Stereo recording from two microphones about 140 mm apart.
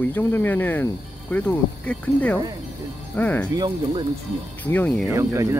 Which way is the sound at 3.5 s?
30° right (ahead or behind).